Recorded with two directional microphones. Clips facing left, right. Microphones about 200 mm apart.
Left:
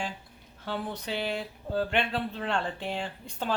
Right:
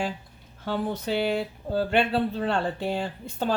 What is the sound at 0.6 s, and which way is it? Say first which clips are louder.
Speech: right 6 dB; 45° right (ahead or behind).